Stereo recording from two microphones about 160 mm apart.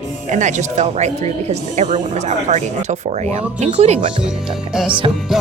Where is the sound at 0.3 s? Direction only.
50° right (ahead or behind).